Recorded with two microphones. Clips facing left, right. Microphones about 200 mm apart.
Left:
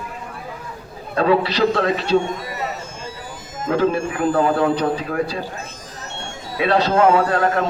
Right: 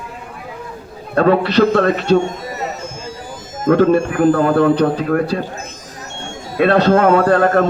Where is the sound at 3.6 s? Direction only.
50° right (ahead or behind).